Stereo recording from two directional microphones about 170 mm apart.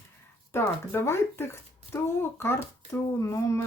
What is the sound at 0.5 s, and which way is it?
Speech, 15° left (ahead or behind).